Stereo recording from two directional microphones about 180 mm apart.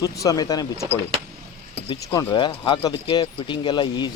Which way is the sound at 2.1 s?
15° left (ahead or behind).